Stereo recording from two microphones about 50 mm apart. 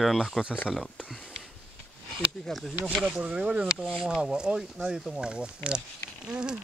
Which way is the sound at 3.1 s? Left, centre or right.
Right.